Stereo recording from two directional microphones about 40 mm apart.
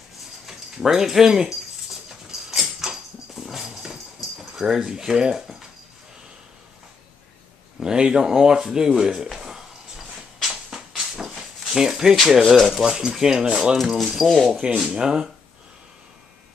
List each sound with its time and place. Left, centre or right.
0.5 s speech: centre
2.0 s a sound: centre
7.8 s a sound: centre
12.2 s speech: centre
12.8 s speech: centre
13.9 s speech: centre
14.8 s speech: centre